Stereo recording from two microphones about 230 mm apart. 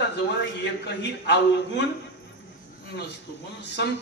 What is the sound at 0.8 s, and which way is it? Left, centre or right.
Speech, left.